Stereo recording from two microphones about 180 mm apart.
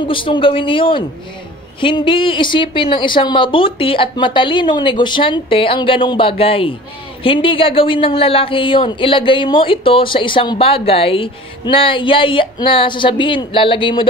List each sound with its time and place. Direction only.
0.0 s speech: 30° left (ahead or behind)